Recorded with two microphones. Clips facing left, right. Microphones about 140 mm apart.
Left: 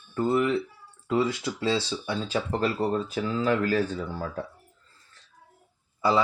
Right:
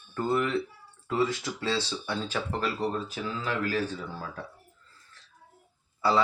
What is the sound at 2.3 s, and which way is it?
Speech, 35° left (ahead or behind).